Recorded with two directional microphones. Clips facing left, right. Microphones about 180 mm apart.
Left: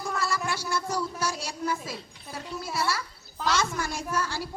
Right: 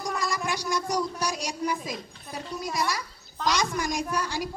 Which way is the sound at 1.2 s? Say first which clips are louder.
Right 1 dB; 15° right (ahead or behind).